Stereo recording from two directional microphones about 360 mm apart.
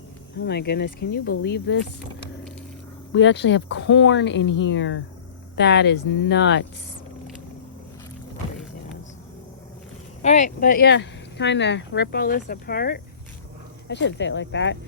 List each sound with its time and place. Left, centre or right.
0.3 s speech: left
3.1 s speech: left
10.2 s speech: centre